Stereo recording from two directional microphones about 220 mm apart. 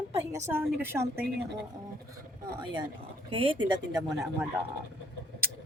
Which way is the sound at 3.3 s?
25° right (ahead or behind).